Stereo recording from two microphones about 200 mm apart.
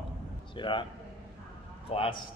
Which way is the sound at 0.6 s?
25° left (ahead or behind).